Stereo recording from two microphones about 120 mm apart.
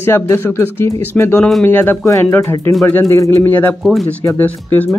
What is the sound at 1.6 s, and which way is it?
Speech, 15° left (ahead or behind).